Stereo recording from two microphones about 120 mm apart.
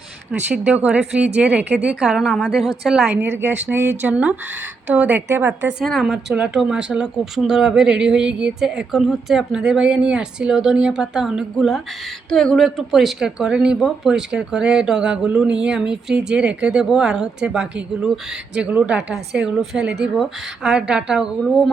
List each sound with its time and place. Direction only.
0.3 s speech: 10° right (ahead or behind)
3.2 s speech: 20° right (ahead or behind)
5.8 s speech: centre (ahead or behind)